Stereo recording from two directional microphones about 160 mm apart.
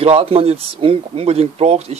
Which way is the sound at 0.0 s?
40° right (ahead or behind).